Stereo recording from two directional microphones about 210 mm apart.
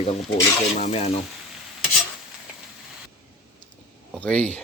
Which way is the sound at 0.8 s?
30° left (ahead or behind).